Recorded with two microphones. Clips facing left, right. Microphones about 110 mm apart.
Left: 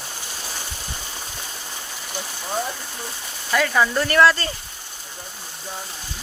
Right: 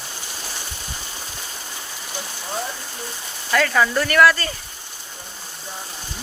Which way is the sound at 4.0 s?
25° left (ahead or behind).